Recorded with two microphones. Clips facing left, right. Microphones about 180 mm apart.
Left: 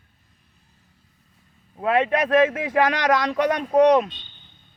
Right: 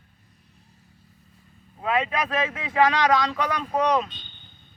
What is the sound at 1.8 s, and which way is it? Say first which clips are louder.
Speech: left 5 dB; 60° left (ahead or behind).